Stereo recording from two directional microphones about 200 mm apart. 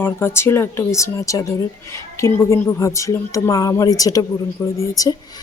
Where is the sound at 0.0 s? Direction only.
10° left (ahead or behind).